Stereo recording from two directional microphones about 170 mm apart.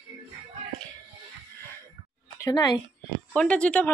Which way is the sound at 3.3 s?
5° left (ahead or behind).